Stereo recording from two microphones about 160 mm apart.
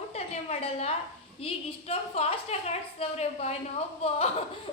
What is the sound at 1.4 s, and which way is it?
A woman's voice, 40° left (ahead or behind).